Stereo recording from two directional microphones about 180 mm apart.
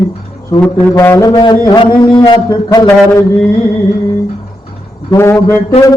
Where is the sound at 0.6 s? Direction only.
10° left (ahead or behind).